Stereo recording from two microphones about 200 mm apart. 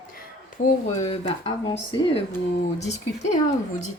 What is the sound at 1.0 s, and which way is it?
Speech, 25° left (ahead or behind).